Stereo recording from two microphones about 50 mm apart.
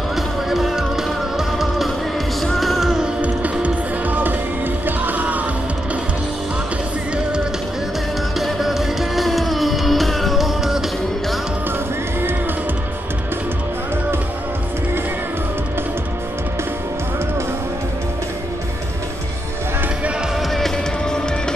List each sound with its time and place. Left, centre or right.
0.1 s music: centre
2.4 s music: centre
3.2 s music: right
8.4 s music: centre
20.5 s music: centre